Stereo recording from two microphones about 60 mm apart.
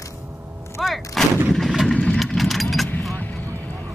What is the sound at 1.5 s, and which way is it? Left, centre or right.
Vehicle, centre.